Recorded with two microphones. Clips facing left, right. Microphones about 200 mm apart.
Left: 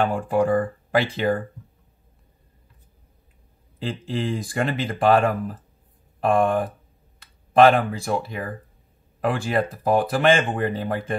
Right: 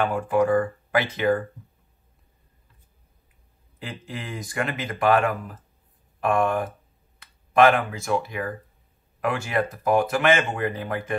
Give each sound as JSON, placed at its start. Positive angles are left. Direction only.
{"t": 0.0, "sound": "speech", "side_deg": 30}
{"t": 4.1, "sound": "speech", "side_deg": 30}